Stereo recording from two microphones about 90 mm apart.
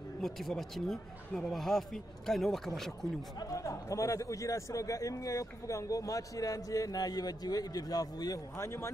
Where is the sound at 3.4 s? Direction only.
35° left (ahead or behind).